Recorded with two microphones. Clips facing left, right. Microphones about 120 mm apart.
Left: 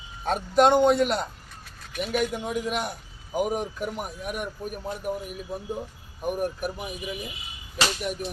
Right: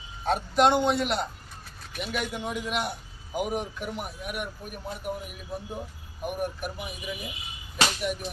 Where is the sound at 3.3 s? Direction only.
40° left (ahead or behind).